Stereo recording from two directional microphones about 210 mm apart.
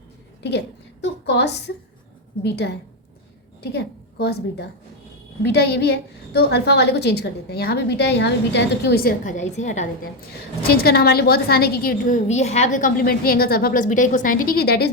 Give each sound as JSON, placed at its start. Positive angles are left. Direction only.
{"t": 1.0, "sound": "a woman's voice", "side_deg": 55}
{"t": 9.2, "sound": "a woman's voice", "side_deg": 35}
{"t": 10.7, "sound": "a woman's voice", "side_deg": 45}